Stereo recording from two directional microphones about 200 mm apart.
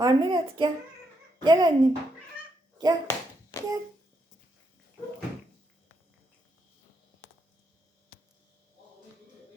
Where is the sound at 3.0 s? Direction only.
15° left (ahead or behind).